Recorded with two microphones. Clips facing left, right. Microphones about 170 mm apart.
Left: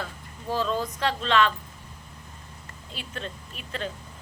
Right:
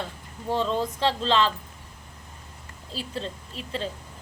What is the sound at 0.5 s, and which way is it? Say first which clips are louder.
A woman's voice: right 2 dB; 25° right (ahead or behind).